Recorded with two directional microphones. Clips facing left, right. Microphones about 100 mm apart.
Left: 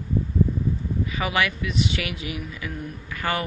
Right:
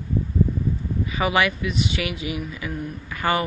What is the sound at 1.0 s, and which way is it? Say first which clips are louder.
Speech: right 4 dB; 15° right (ahead or behind).